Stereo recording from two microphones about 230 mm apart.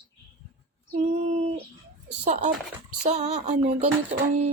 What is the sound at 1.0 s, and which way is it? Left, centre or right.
Speech, right.